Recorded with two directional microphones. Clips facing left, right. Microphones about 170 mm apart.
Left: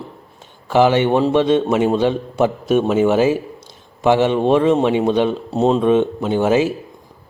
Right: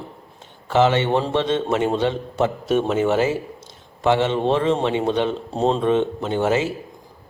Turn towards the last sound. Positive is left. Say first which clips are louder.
# left 4 dB
turn(degrees=15)  # may be behind; listen again after turning